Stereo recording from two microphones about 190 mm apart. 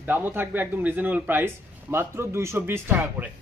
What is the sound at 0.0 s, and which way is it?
Speech, 10° right (ahead or behind).